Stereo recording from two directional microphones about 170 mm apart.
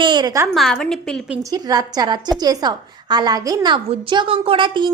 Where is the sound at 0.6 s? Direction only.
5° left (ahead or behind).